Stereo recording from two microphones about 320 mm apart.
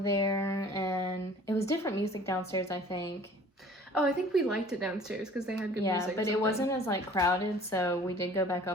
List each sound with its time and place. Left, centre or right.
0.0 s speech: centre
3.9 s a woman's voice: centre
5.8 s a woman's voice: centre